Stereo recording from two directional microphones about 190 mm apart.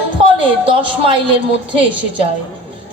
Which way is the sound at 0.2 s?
30° right (ahead or behind).